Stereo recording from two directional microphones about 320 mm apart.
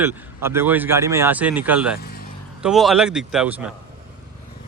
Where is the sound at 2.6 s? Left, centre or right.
Centre.